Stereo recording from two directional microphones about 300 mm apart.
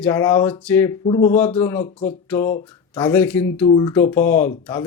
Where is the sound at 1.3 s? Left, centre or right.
Centre.